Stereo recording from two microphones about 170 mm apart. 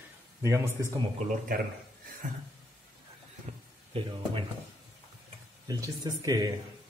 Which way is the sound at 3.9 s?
30° right (ahead or behind).